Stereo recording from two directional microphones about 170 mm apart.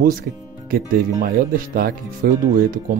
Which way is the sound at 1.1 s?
50° right (ahead or behind).